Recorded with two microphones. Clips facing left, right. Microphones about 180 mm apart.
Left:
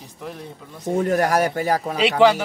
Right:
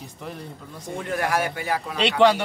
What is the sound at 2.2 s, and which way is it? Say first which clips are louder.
Speech: left 2 dB; 5° left (ahead or behind).